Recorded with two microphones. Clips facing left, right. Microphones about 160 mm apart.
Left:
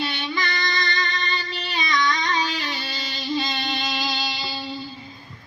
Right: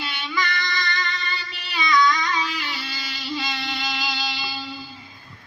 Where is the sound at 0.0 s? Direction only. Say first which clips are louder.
Left 1 dB; 30° left (ahead or behind).